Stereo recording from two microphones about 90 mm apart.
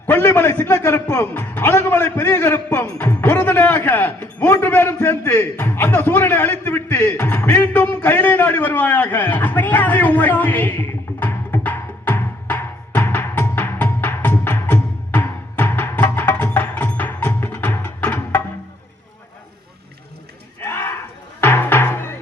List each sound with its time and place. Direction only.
0.1 s a man's voice: 20° left (ahead or behind)
3.1 s a sound: 25° left (ahead or behind)
16.1 s music: 20° left (ahead or behind)
20.6 s cattle: 25° left (ahead or behind)
21.4 s music: 20° left (ahead or behind)